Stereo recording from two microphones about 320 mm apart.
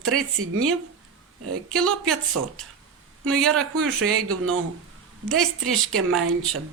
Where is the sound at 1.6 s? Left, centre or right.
Centre.